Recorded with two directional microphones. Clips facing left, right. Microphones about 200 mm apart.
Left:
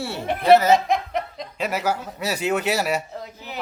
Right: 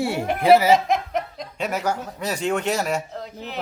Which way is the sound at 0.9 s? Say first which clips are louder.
Even; centre (ahead or behind).